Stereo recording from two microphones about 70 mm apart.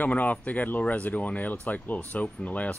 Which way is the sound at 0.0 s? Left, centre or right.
Left.